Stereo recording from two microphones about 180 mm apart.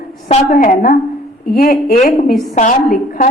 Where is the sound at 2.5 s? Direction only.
45° left (ahead or behind).